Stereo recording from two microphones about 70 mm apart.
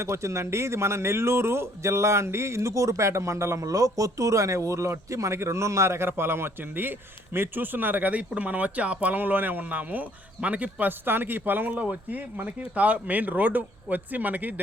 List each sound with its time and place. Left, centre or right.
0.0 s speech: right